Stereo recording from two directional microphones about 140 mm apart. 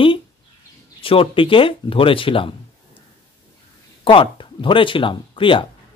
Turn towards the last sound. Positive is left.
turn(degrees=35)  # may be behind; listen again after turning